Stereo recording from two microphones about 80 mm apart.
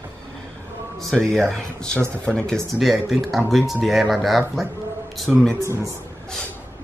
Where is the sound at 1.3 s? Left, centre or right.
Centre.